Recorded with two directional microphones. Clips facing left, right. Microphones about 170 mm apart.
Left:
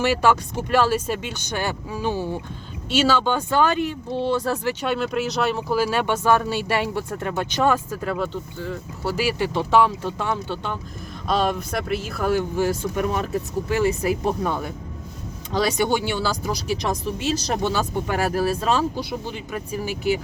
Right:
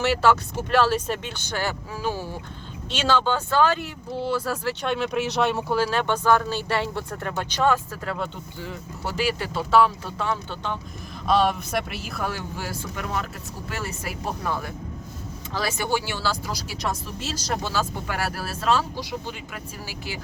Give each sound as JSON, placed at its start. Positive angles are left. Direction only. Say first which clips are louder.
{"t": 0.0, "sound": "speech", "louder": "left 1 dB", "side_deg": 15}
{"t": 4.8, "sound": "speech", "louder": "left 2 dB", "side_deg": 5}
{"t": 11.3, "sound": "speech", "louder": "right 1 dB", "side_deg": 0}
{"t": 12.3, "sound": "speech", "louder": "left 11 dB", "side_deg": 15}
{"t": 15.5, "sound": "speech", "louder": "left 5 dB", "side_deg": 20}